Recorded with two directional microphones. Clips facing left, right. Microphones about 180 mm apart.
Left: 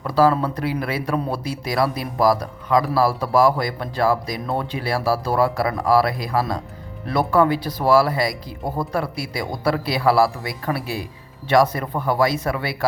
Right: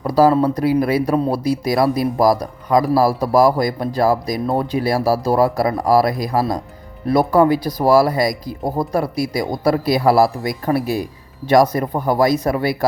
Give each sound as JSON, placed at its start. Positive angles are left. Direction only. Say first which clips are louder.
{"t": 0.0, "sound": "speech", "louder": "right 4 dB", "side_deg": -40}